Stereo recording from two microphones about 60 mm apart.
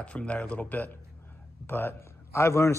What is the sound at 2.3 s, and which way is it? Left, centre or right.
Speech, left.